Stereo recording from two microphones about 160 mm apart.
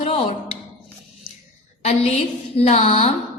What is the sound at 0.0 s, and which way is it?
Music, 40° left (ahead or behind).